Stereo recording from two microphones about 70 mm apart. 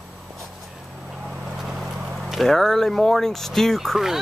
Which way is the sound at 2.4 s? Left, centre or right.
Centre.